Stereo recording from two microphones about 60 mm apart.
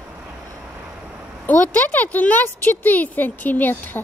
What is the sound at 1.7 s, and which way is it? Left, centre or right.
Speech, left.